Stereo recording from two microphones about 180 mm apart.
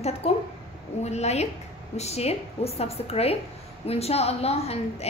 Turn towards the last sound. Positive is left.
turn(degrees=35)  # may be behind; listen again after turning